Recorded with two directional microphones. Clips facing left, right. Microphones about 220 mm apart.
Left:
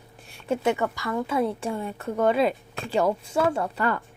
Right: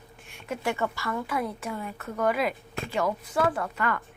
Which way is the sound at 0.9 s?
15° left (ahead or behind).